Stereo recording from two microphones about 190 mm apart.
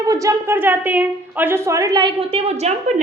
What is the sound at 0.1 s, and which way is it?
A woman's voice, 15° right (ahead or behind).